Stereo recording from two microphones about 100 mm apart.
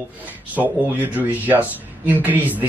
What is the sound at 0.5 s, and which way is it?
Speech, 15° right (ahead or behind).